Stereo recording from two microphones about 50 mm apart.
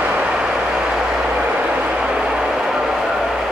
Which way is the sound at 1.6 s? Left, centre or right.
Right.